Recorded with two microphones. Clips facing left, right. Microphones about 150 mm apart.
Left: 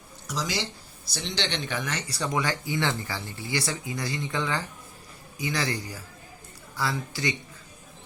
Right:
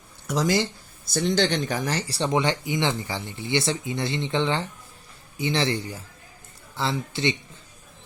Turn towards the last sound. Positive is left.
turn(degrees=-25)  # may be behind; listen again after turning